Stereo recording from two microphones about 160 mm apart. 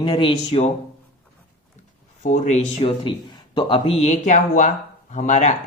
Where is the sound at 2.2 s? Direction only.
50° left (ahead or behind).